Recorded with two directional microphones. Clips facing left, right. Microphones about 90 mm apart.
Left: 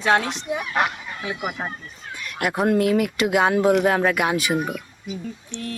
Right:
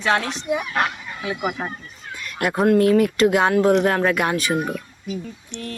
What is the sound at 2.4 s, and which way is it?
Speech, 5° left (ahead or behind).